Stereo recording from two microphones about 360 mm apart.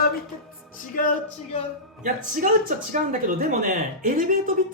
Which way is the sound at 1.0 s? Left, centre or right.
Left.